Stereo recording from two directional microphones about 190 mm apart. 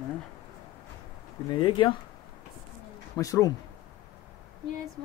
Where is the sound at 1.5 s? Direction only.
25° left (ahead or behind).